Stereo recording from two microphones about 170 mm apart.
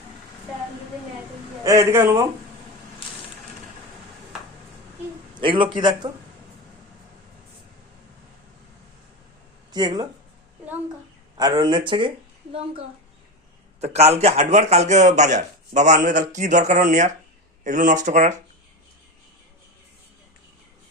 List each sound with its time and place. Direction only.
1.6 s speech: 15° right (ahead or behind)
5.3 s a man's voice: 30° right (ahead or behind)
9.7 s a man's voice: 25° right (ahead or behind)
11.3 s a man's voice: 25° right (ahead or behind)
13.8 s a man's voice: 40° right (ahead or behind)